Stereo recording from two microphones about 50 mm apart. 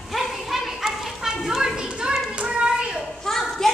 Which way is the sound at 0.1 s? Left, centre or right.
Centre.